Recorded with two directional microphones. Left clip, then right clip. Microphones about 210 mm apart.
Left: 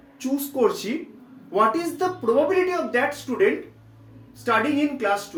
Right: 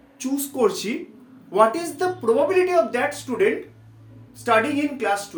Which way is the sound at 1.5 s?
25° right (ahead or behind).